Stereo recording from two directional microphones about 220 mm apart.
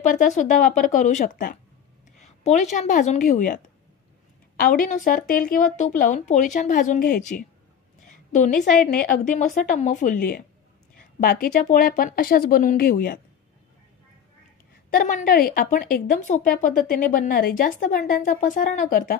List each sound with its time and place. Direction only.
0.0 s a woman's voice: 35° left (ahead or behind)
8.0 s a sound: 35° left (ahead or behind)
9.1 s speech: 35° left (ahead or behind)
14.9 s speech: 40° left (ahead or behind)